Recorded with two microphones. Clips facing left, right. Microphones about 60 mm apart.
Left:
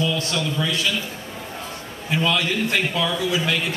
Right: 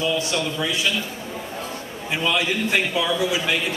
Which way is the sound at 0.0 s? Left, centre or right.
Centre.